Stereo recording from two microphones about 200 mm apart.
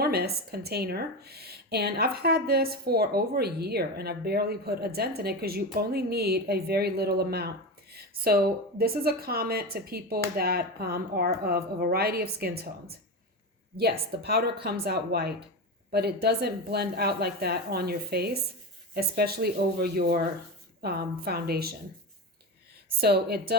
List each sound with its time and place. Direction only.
0.0 s a woman's voice: 50° right (ahead or behind)
14.1 s a woman's voice: 50° right (ahead or behind)
23.0 s a woman's voice: 55° right (ahead or behind)